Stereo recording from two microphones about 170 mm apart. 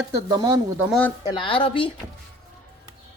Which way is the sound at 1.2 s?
30° left (ahead or behind).